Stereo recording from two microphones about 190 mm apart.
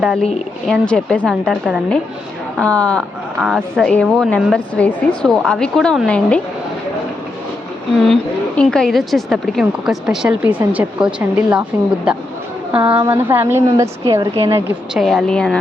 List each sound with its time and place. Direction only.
0.0 s a woman's voice: centre (ahead or behind)
8.0 s a woman's voice: centre (ahead or behind)
12.7 s a woman's voice: 25° right (ahead or behind)
13.1 s a woman's voice: 10° right (ahead or behind)
14.9 s a woman's voice: centre (ahead or behind)